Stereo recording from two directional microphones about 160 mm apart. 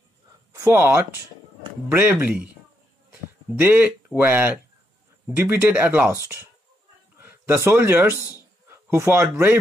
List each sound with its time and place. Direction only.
0.5 s speech: 15° right (ahead or behind)